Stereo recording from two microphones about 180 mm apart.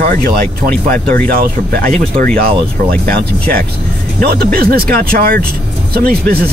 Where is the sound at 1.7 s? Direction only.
55° right (ahead or behind).